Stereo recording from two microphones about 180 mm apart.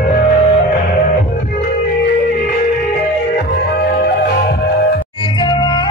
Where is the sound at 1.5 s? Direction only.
55° left (ahead or behind).